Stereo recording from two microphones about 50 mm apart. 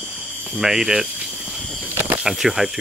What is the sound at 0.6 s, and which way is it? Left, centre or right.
Speech, centre.